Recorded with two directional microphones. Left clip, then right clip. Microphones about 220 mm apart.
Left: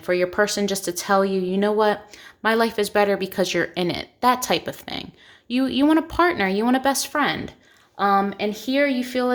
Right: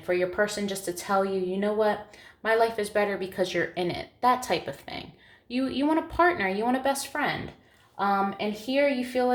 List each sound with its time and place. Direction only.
0.0 s speech: 45° left (ahead or behind)